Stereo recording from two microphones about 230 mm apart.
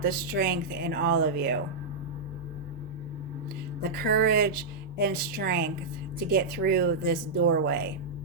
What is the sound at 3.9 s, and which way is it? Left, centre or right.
Speech, right.